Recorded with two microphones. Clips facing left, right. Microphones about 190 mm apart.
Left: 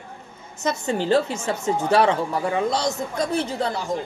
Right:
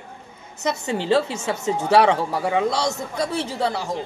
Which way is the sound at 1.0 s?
75° right (ahead or behind).